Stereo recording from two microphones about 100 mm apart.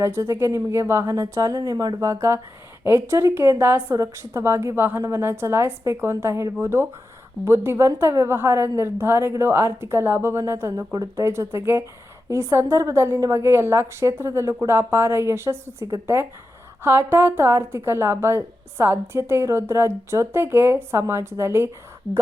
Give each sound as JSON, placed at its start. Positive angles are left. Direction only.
{"t": 0.0, "sound": "a woman's voice", "side_deg": -25}